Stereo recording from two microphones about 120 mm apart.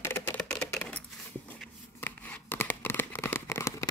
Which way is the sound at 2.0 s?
15° left (ahead or behind).